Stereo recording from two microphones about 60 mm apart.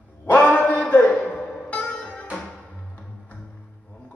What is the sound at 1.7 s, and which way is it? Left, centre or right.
Music, left.